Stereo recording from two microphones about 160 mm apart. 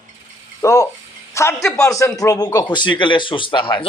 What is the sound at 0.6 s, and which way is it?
A man's voice, 20° left (ahead or behind).